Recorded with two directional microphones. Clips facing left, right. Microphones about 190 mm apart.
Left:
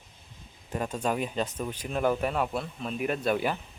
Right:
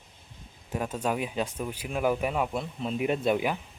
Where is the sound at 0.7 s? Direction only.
5° right (ahead or behind).